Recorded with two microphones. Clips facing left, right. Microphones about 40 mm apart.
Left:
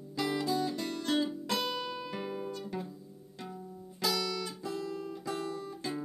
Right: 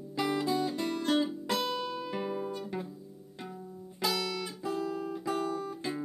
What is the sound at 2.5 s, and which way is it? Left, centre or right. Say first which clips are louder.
Music: right 2 dB; centre.